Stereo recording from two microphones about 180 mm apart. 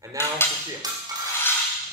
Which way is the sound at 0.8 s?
20° right (ahead or behind).